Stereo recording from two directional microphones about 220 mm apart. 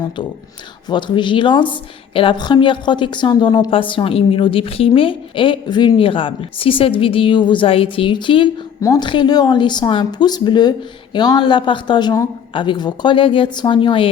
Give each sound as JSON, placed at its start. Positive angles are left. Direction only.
{"t": 0.9, "sound": "a woman's voice", "side_deg": 20}